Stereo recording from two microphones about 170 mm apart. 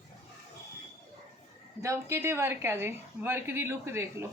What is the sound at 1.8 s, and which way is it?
A woman's voice, 15° right (ahead or behind).